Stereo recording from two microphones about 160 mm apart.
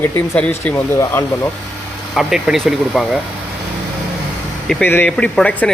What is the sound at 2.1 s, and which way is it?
Speech, centre (ahead or behind).